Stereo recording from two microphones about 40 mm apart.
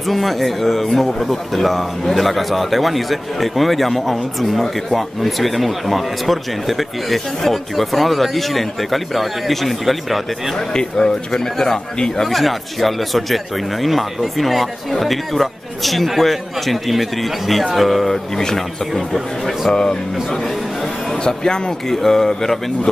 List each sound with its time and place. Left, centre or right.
0.1 s speech: centre
10.7 s speech: centre
19.1 s speech: centre
19.7 s speech: left
21.2 s speech: centre